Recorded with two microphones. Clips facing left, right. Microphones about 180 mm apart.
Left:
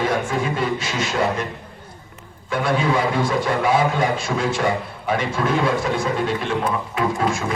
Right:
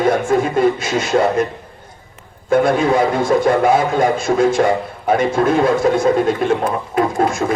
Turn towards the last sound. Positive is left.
turn(degrees=-45)  # may be behind; listen again after turning